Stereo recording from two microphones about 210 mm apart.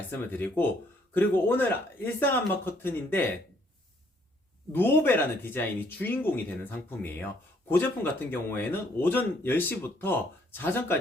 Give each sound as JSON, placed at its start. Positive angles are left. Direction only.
{"t": 0.3, "sound": "speech", "side_deg": 10}
{"t": 4.7, "sound": "speech", "side_deg": 10}